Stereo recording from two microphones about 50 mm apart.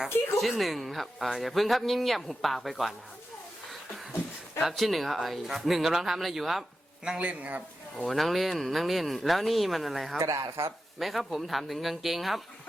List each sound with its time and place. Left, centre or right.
0.3 s speech: centre
4.6 s speech: centre
7.2 s a man's voice: right
8.0 s speech: centre
10.2 s speech: right
11.0 s speech: centre